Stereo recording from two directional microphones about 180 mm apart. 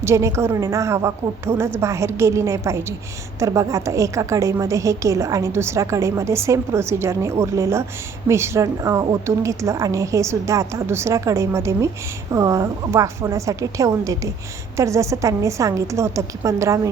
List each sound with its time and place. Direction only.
0.0 s a woman's voice: 15° right (ahead or behind)